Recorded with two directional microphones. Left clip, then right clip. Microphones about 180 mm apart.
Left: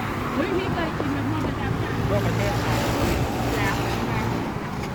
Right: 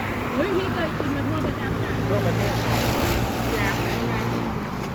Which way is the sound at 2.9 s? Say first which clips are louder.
Right 1 dB; 55° left (ahead or behind).